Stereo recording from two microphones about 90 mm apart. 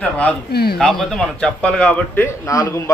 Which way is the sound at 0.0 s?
15° left (ahead or behind).